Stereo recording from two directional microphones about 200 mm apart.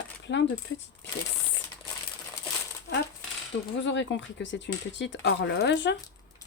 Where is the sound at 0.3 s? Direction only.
60° left (ahead or behind).